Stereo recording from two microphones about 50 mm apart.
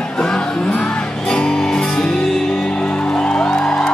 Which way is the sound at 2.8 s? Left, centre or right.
Left.